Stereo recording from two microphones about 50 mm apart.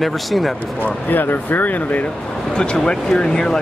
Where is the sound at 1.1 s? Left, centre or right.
Left.